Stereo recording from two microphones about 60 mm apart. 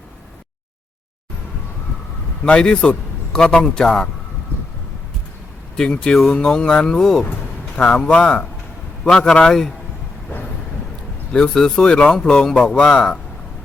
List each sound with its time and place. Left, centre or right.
2.4 s a man's voice: centre
5.7 s speech: centre
11.3 s speech: centre